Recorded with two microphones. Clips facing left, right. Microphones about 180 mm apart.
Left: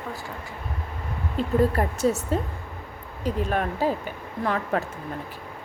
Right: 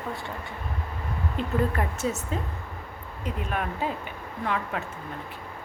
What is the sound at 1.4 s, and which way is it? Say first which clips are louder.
A woman's voice: left 5 dB; 35° left (ahead or behind).